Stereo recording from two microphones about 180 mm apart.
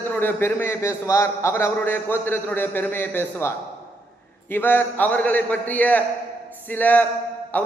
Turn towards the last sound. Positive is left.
turn(degrees=10)  # may be behind; listen again after turning